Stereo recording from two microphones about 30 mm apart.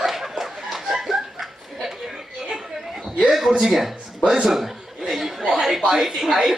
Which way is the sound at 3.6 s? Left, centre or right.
Centre.